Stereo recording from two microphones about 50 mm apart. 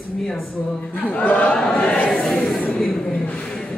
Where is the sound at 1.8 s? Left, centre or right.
Left.